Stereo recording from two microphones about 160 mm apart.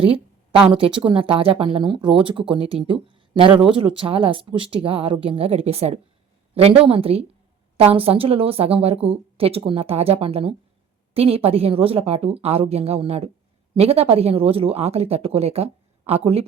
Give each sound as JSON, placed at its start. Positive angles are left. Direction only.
{"t": 0.0, "sound": "a woman's voice", "side_deg": -35}
{"t": 3.5, "sound": "speech", "side_deg": -5}
{"t": 3.8, "sound": "a woman's voice", "side_deg": -35}